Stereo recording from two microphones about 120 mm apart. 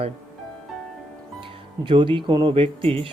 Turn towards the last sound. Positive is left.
turn(degrees=-50)  # may be behind; listen again after turning